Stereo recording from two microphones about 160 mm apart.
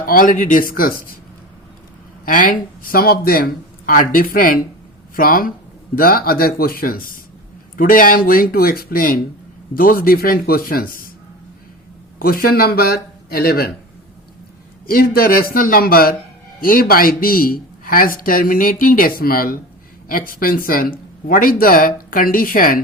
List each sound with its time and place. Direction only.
0.0 s speech: 60° left (ahead or behind)
2.2 s speech: 55° left (ahead or behind)
12.2 s speech: 65° left (ahead or behind)
14.8 s speech: 65° left (ahead or behind)